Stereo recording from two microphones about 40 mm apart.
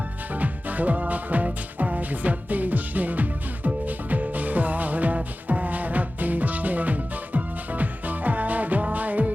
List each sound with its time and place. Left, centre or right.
0.3 s music: right